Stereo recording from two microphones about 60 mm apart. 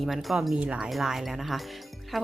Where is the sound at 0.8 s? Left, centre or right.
Centre.